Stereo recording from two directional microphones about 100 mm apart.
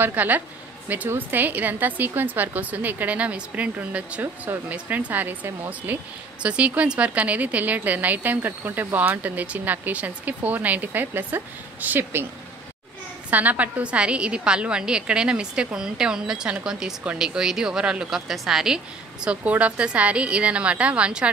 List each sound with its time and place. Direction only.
0.0 s speech: 15° right (ahead or behind)
13.3 s speech: 15° right (ahead or behind)